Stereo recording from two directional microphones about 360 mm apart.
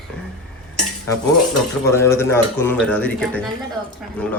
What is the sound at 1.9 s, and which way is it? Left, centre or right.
A woman's voice, centre.